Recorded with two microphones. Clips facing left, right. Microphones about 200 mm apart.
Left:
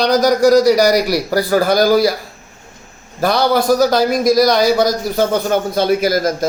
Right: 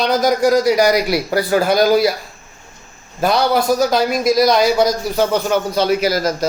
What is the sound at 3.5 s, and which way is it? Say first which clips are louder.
Speech: left 2 dB; 40° left (ahead or behind).